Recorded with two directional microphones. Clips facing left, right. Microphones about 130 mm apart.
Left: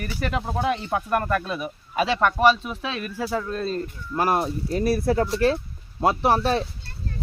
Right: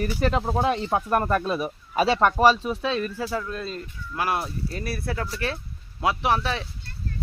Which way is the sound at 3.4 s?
35° left (ahead or behind).